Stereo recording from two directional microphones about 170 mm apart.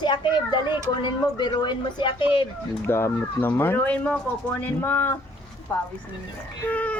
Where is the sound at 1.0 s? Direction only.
25° left (ahead or behind).